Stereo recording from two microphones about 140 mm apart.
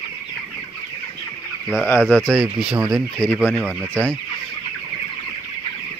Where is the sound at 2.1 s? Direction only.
10° left (ahead or behind).